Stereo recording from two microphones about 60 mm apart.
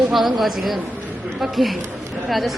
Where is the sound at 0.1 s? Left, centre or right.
Centre.